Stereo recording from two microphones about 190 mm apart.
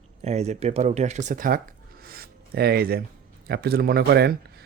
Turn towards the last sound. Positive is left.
turn(degrees=-55)  # may be behind; listen again after turning